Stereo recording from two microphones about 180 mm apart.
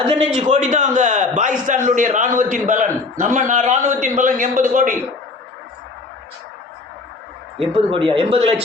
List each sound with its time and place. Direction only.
0.3 s a man's voice: 45° right (ahead or behind)
7.7 s speech: 30° right (ahead or behind)